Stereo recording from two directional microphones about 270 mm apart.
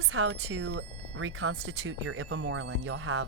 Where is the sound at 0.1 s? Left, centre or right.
Right.